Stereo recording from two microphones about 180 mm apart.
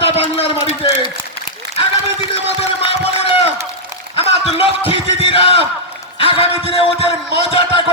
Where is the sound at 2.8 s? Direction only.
30° left (ahead or behind).